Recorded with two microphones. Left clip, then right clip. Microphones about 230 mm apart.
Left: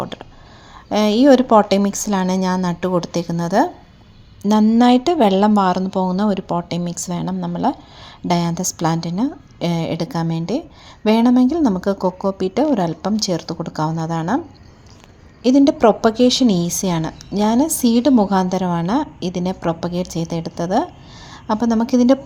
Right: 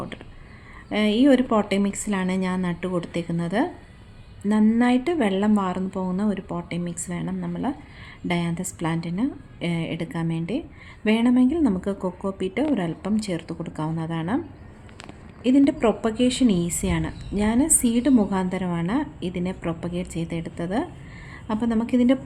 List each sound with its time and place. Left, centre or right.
0.9 s a woman's voice: left
15.4 s a woman's voice: left